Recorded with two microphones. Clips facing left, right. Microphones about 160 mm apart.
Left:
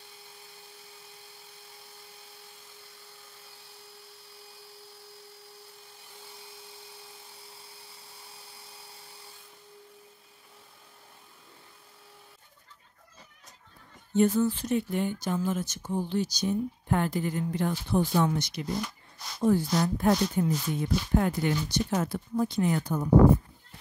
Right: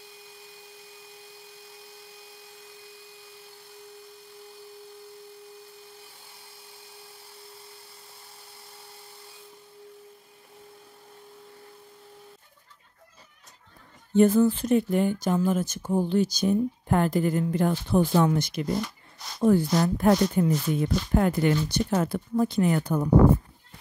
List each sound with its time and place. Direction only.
14.1 s speech: 50° right (ahead or behind)